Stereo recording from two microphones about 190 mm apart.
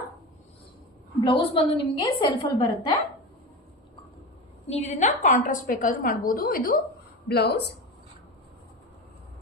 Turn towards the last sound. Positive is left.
turn(degrees=60)  # may be behind; listen again after turning